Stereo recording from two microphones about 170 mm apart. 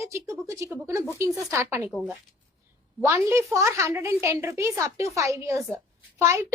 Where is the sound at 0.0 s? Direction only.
15° right (ahead or behind).